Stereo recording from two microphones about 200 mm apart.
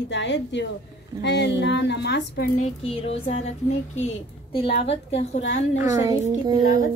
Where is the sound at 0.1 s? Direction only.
65° left (ahead or behind).